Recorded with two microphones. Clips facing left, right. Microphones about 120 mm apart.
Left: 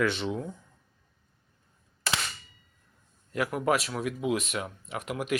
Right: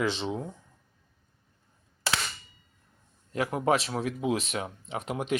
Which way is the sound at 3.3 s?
30° right (ahead or behind).